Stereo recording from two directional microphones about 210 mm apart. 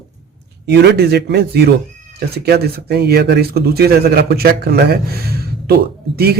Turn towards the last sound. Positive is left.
turn(degrees=-50)  # may be behind; listen again after turning